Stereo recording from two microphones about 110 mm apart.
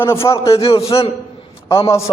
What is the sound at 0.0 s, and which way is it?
Speech, 25° left (ahead or behind).